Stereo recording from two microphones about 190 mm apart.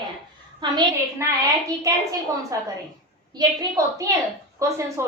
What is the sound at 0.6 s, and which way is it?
Speech, 20° right (ahead or behind).